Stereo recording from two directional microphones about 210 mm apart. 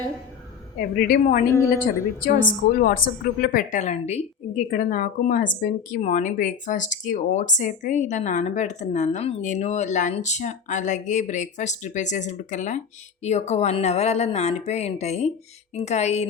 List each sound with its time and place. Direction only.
0.8 s a woman's voice: 45° left (ahead or behind)